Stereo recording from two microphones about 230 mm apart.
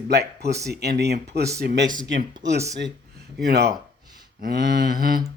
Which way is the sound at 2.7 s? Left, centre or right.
Right.